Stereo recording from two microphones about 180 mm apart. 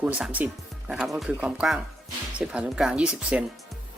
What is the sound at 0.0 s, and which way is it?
Speech, 5° right (ahead or behind).